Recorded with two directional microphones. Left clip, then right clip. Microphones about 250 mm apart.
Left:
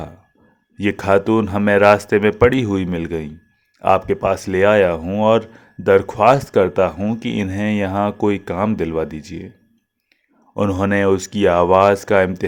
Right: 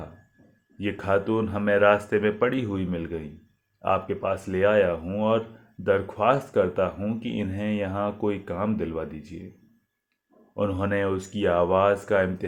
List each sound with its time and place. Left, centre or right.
0.8 s speech: left
10.5 s speech: left